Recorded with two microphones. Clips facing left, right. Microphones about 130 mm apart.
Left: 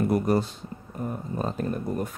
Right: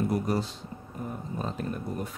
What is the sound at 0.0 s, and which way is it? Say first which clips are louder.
Speech: left 5 dB; 55° left (ahead or behind).